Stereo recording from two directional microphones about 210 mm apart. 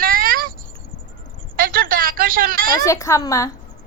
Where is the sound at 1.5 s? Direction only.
40° right (ahead or behind).